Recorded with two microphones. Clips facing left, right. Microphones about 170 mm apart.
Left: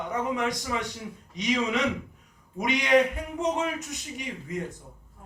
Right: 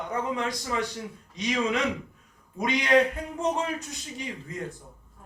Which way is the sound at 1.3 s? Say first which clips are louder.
Even; 20° left (ahead or behind).